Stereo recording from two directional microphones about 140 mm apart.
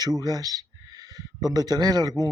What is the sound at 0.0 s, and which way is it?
Speech, 25° right (ahead or behind).